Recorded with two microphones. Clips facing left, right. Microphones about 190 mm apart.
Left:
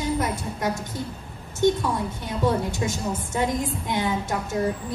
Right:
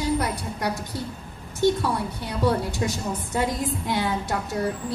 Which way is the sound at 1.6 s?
20° left (ahead or behind).